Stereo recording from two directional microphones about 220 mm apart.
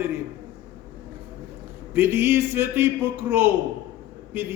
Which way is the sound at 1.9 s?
10° right (ahead or behind).